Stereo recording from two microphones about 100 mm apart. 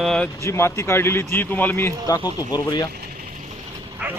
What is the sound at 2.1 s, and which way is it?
Speech, 40° left (ahead or behind).